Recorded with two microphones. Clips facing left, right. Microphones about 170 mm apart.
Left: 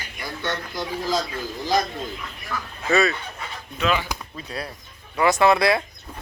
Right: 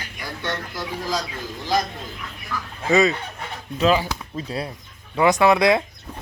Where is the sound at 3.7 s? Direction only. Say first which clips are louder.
Right 5 dB; 35° right (ahead or behind); by 5.8 s 15° right (ahead or behind).